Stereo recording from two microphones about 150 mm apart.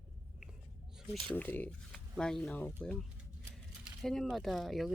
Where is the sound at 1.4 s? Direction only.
10° left (ahead or behind).